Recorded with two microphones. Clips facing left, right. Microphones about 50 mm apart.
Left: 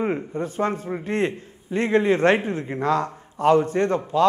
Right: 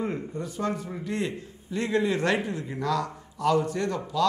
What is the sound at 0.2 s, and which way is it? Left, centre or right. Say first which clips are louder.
A man's voice: left 6 dB; left.